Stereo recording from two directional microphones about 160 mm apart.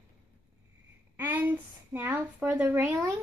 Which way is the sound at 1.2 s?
10° right (ahead or behind).